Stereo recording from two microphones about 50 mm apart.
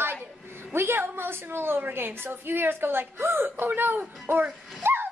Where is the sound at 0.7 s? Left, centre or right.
Right.